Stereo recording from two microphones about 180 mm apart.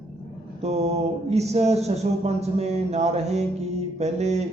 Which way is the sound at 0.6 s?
35° right (ahead or behind).